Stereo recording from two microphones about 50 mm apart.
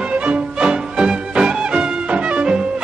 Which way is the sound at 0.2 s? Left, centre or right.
Right.